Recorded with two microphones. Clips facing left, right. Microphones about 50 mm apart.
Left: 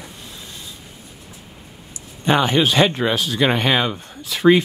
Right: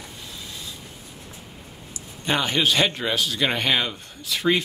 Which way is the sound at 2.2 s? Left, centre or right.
Left.